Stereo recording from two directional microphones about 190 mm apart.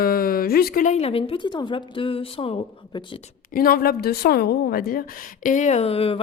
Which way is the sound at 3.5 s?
50° left (ahead or behind).